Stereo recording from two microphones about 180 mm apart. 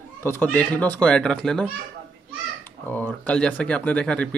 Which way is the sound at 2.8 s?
10° left (ahead or behind).